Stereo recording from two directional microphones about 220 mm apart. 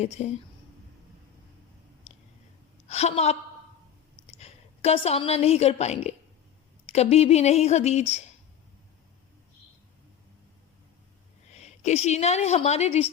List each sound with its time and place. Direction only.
0.2 s speech: 30° left (ahead or behind)
2.8 s a woman's voice: 30° left (ahead or behind)
4.4 s a woman's voice: 30° left (ahead or behind)
11.5 s a woman's voice: 30° left (ahead or behind)